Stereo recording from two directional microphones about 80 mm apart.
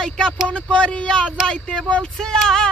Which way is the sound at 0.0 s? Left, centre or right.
Centre.